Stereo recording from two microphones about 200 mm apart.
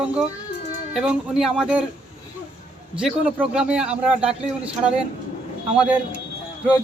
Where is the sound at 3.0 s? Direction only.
5° right (ahead or behind).